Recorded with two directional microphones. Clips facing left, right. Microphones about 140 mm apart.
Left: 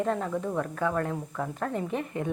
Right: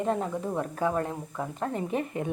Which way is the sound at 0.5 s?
30° right (ahead or behind).